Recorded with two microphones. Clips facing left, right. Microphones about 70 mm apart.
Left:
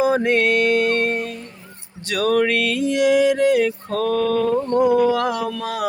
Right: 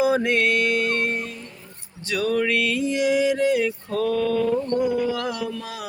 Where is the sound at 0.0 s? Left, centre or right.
Left.